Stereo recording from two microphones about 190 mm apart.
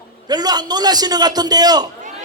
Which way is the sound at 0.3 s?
20° right (ahead or behind).